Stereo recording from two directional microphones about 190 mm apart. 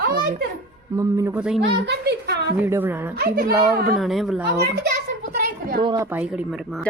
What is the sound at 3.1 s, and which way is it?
Speech, 55° right (ahead or behind).